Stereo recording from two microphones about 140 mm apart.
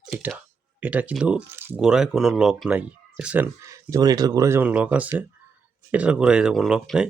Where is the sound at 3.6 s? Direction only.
25° right (ahead or behind).